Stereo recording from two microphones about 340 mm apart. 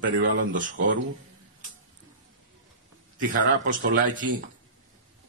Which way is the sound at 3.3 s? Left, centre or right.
Right.